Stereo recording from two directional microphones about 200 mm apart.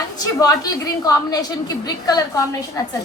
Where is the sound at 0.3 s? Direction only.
20° left (ahead or behind).